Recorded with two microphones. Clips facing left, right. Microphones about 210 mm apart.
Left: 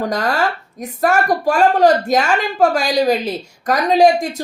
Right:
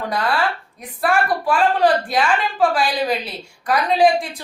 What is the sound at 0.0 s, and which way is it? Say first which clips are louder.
A woman's voice: left 3 dB; 40° left (ahead or behind).